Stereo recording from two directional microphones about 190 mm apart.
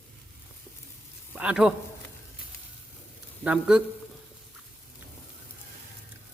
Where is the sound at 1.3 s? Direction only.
5° right (ahead or behind).